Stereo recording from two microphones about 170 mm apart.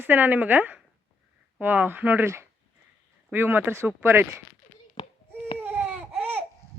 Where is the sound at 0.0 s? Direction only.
10° right (ahead or behind).